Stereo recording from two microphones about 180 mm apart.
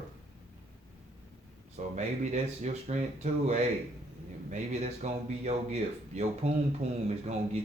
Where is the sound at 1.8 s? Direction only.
45° right (ahead or behind).